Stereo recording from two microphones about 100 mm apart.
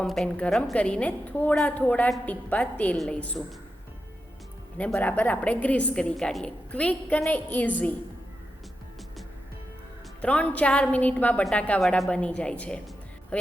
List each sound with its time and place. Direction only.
0.3 s a woman's voice: 15° left (ahead or behind)
4.9 s a woman's voice: 15° left (ahead or behind)
10.2 s a woman's voice: 15° left (ahead or behind)